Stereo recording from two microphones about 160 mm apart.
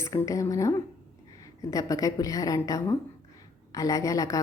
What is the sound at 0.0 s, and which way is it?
A woman's voice, 20° left (ahead or behind).